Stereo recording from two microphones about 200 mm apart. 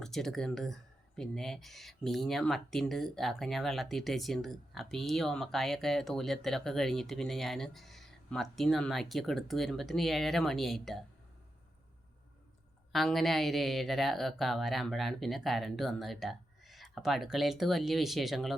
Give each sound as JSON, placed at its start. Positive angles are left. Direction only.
{"t": 0.0, "sound": "speech", "side_deg": 0}
{"t": 12.9, "sound": "speech", "side_deg": 0}